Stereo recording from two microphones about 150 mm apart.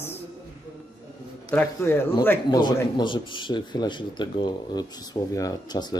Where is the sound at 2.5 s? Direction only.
30° left (ahead or behind).